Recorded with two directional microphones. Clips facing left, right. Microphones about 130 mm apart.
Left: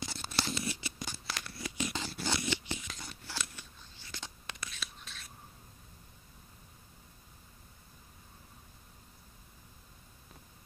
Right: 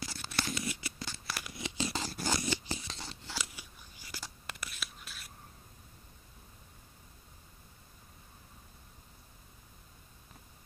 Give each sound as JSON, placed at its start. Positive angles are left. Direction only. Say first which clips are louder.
{"t": 0.0, "sound": "a sound", "louder": "left 1 dB", "side_deg": 30}
{"t": 0.9, "sound": "scissors", "louder": "left 1 dB", "side_deg": 15}
{"t": 1.2, "sound": "scissors", "louder": "even", "side_deg": -5}
{"t": 1.5, "sound": "scissors", "louder": "right 1 dB", "side_deg": -20}
{"t": 1.9, "sound": "scissors", "louder": "right 2 dB", "side_deg": -35}
{"t": 3.5, "sound": "whispering", "louder": "even", "side_deg": -10}